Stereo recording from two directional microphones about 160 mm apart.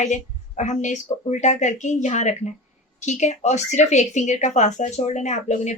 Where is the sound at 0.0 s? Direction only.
50° left (ahead or behind).